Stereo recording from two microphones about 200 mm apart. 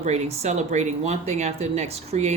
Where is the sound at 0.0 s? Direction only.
35° right (ahead or behind).